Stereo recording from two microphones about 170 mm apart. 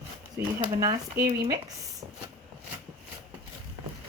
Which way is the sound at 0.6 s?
20° right (ahead or behind).